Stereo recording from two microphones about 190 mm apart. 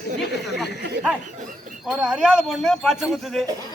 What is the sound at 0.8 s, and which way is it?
Speech, 60° right (ahead or behind).